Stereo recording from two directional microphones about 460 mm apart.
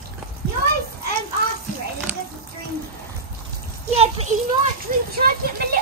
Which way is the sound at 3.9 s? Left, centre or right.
Centre.